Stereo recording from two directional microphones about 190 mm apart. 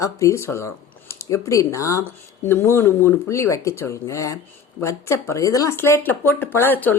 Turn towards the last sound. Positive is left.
turn(degrees=10)  # may be behind; listen again after turning